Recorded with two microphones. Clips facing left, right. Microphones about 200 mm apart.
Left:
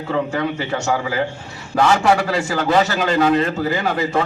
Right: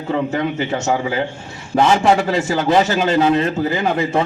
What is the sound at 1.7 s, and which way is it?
A man's voice, 20° right (ahead or behind).